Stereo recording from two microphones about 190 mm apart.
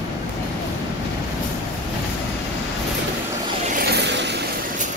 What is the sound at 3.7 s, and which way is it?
Vehicle, 60° right (ahead or behind).